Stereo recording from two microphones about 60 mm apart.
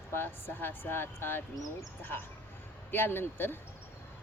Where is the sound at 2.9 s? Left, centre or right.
Left.